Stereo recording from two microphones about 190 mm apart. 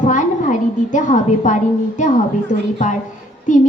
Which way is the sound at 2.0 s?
40° left (ahead or behind).